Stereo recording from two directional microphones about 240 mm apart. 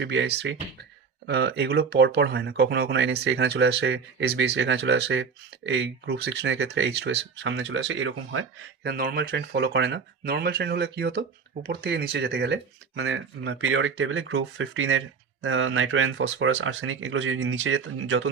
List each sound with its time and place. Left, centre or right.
0.0 s speech: right
8.8 s speech: right